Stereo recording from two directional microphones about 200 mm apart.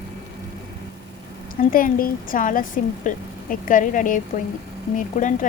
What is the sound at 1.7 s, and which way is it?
A woman's voice, 45° left (ahead or behind).